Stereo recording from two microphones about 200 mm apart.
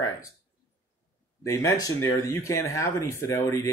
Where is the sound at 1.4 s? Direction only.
15° left (ahead or behind).